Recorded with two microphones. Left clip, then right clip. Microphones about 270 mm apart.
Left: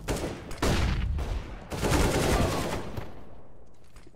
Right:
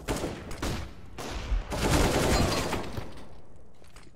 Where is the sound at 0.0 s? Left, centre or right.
Centre.